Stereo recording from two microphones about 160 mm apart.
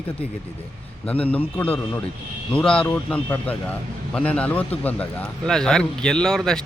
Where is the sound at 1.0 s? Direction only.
10° left (ahead or behind).